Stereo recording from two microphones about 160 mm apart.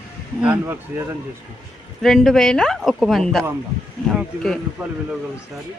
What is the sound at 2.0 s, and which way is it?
A woman's voice, centre (ahead or behind).